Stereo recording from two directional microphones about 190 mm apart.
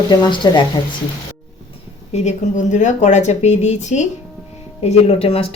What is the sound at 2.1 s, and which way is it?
Speech, 40° left (ahead or behind).